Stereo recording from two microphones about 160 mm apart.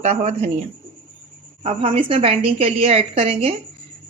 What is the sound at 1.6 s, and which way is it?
A woman's voice, 35° right (ahead or behind).